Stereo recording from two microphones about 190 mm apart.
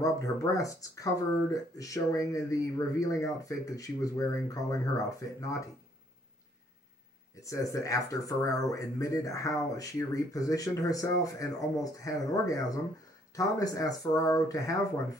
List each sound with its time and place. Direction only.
0.0 s speech: 15° left (ahead or behind)
7.4 s speech: 15° left (ahead or behind)